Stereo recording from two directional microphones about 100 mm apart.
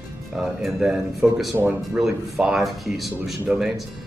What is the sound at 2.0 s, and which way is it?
Speech, 5° right (ahead or behind).